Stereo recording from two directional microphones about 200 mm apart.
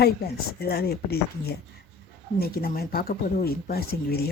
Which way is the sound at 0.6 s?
50° left (ahead or behind).